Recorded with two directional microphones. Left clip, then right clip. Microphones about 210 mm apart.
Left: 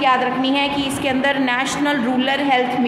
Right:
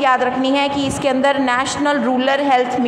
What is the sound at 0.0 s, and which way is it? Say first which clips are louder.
A woman's voice: right 1 dB; 25° right (ahead or behind).